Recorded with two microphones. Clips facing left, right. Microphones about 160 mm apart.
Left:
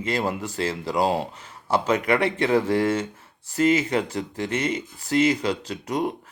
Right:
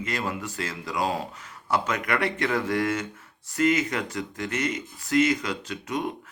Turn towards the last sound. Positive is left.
turn(degrees=35)  # may be behind; listen again after turning